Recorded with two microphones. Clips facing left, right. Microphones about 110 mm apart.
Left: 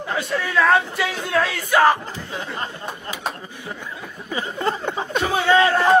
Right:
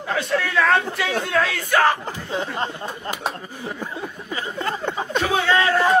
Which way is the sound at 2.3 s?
25° right (ahead or behind).